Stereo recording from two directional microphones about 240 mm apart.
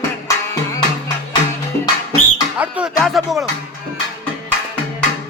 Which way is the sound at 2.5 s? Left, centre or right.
Centre.